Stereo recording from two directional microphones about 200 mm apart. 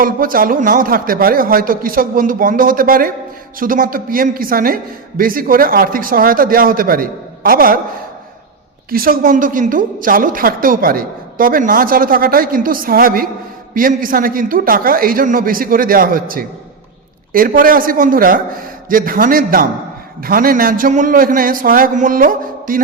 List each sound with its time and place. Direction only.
0.0 s a woman's voice: 45° right (ahead or behind)
8.9 s a woman's voice: 45° right (ahead or behind)